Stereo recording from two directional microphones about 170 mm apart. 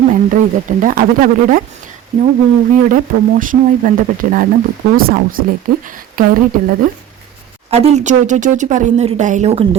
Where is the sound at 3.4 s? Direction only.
50° right (ahead or behind).